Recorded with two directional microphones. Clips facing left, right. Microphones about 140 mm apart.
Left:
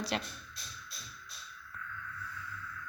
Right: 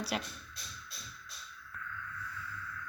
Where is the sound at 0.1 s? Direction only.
5° right (ahead or behind).